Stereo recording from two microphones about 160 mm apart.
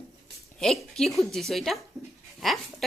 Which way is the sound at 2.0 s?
Centre (ahead or behind).